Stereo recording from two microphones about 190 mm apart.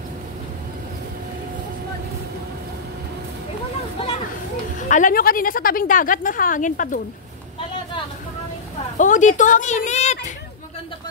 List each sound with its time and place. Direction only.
4.8 s a woman's voice: 40° left (ahead or behind)
8.9 s speech: 40° left (ahead or behind)